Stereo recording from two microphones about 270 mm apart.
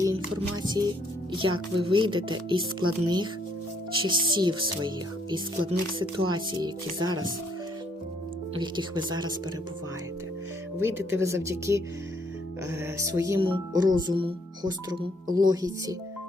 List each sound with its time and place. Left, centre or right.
0.5 s speech: centre
6.0 s speech: centre
8.5 s speech: centre
10.8 s speech: centre